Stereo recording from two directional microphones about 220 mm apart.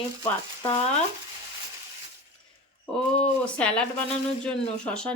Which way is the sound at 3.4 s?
5° left (ahead or behind).